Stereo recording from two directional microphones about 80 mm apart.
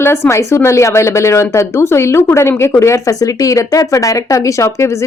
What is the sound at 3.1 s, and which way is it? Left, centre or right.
Speech, left.